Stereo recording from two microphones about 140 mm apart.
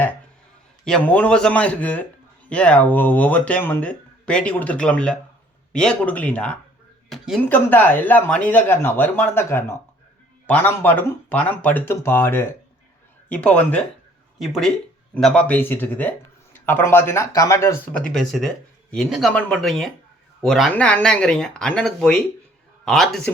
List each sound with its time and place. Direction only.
0.9 s speech: 10° left (ahead or behind)
18.1 s speech: 5° left (ahead or behind)